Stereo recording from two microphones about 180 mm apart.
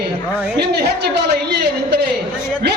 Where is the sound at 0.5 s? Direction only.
60° right (ahead or behind).